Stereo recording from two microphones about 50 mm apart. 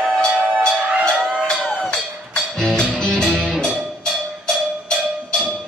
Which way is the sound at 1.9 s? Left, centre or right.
Centre.